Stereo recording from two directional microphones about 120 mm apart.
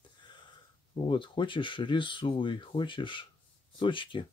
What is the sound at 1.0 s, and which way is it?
Speech, 45° left (ahead or behind).